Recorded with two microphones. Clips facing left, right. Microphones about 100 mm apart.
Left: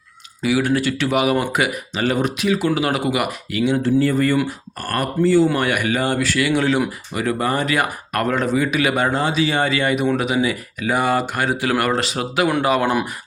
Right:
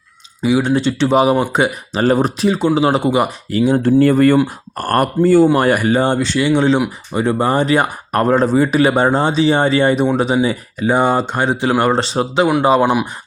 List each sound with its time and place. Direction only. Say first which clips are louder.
0.4 s speech: right 4 dB; 25° right (ahead or behind)
3.8 s speech: right 8 dB; 55° right (ahead or behind)
5.5 s speech: right 6 dB; 40° right (ahead or behind)
12.8 s speech: right 5 dB; 15° right (ahead or behind)